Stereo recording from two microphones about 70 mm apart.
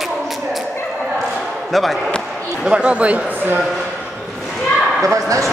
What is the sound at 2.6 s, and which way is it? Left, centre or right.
Speech, centre.